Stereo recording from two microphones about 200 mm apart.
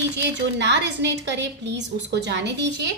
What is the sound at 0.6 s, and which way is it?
A woman's voice, 60° right (ahead or behind).